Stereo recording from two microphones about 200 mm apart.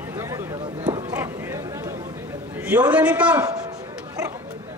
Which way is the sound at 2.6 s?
5° right (ahead or behind).